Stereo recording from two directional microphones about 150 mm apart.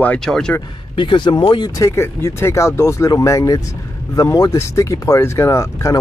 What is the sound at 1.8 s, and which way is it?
Speech, 20° left (ahead or behind).